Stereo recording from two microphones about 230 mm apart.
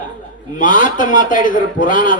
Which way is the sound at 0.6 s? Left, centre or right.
Left.